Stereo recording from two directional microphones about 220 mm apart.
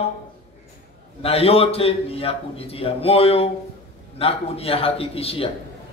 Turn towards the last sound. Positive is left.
turn(degrees=25)  # may be behind; listen again after turning